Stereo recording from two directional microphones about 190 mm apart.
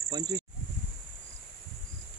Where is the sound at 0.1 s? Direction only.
20° right (ahead or behind).